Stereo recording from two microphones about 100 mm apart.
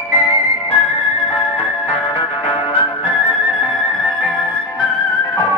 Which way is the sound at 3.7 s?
Centre (ahead or behind).